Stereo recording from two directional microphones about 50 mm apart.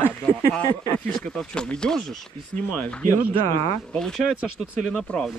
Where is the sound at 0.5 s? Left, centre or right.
Left.